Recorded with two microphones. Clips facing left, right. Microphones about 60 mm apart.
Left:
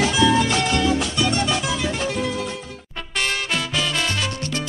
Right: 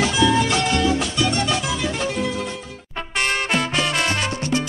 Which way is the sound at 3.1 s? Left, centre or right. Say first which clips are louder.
Right 3 dB; right.